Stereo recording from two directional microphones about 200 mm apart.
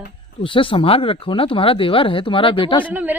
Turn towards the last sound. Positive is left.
turn(degrees=-10)  # may be behind; listen again after turning